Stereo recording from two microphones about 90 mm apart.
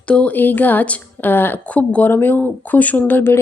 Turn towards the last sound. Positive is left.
turn(degrees=25)  # may be behind; listen again after turning